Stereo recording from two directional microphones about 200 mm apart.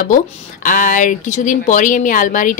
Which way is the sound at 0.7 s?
40° left (ahead or behind).